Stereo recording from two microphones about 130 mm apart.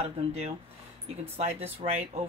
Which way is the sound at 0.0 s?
55° right (ahead or behind).